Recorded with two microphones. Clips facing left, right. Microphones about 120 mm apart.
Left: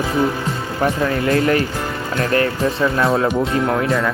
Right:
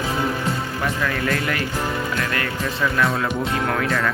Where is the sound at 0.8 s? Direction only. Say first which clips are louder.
Left 7 dB; 30° left (ahead or behind).